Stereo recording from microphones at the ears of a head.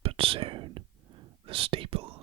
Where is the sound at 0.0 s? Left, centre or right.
Right.